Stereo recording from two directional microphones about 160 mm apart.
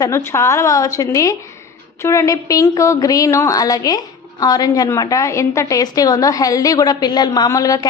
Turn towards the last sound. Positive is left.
turn(degrees=20)  # may be behind; listen again after turning